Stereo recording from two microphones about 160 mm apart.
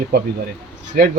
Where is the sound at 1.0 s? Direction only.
65° right (ahead or behind).